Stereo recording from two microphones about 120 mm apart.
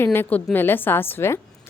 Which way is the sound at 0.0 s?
20° left (ahead or behind).